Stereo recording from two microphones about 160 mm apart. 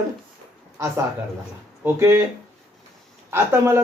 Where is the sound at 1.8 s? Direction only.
15° right (ahead or behind).